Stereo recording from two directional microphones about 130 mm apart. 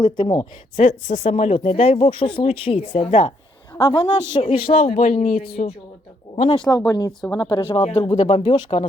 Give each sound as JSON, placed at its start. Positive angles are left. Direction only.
{"t": 0.0, "sound": "speech", "side_deg": 35}
{"t": 0.8, "sound": "speech", "side_deg": 65}
{"t": 3.8, "sound": "speech", "side_deg": 35}
{"t": 4.9, "sound": "speech", "side_deg": 70}
{"t": 6.5, "sound": "speech", "side_deg": 35}